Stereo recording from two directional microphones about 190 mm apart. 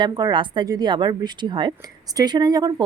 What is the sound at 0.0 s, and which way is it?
A woman's voice, 20° right (ahead or behind).